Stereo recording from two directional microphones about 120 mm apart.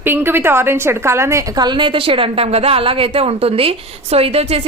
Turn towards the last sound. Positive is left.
turn(degrees=-55)  # may be behind; listen again after turning